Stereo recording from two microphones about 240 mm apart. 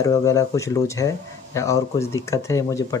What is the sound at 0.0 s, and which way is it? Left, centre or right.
Speech, centre.